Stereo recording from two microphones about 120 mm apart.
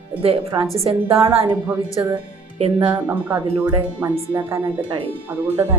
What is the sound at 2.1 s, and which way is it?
Music, 55° right (ahead or behind).